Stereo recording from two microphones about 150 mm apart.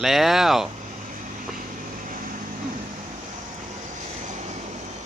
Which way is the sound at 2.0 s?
60° right (ahead or behind).